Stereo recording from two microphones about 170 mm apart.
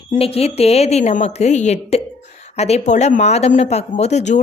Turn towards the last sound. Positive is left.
turn(degrees=45)  # may be behind; listen again after turning